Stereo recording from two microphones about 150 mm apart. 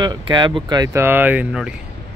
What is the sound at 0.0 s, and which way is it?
Speech, 30° right (ahead or behind).